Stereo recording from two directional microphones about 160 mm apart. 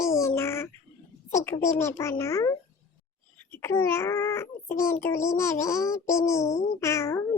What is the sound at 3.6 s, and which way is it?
A child's voice, 15° left (ahead or behind).